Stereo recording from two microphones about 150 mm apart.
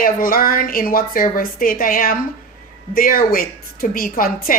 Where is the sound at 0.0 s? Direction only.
75° left (ahead or behind).